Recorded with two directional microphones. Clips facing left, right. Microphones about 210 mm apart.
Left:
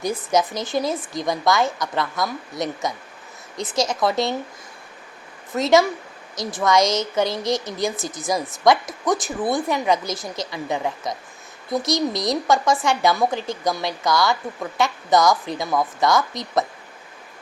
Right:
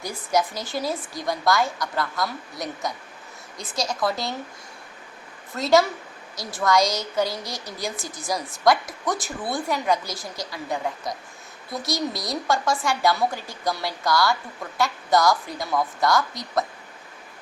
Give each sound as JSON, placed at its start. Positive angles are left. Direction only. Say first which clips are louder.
{"t": 0.0, "sound": "a woman's voice", "louder": "left 3 dB", "side_deg": 20}
{"t": 4.0, "sound": "a woman's voice", "louder": "left 4 dB", "side_deg": 25}
{"t": 5.5, "sound": "a woman's voice", "louder": "left 3 dB", "side_deg": 20}